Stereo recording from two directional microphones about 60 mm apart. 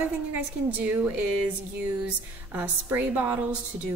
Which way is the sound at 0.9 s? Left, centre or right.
Right.